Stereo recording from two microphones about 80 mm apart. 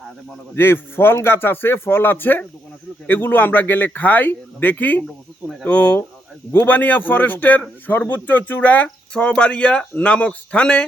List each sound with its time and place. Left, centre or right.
0.5 s speech: left; by 10.8 s centre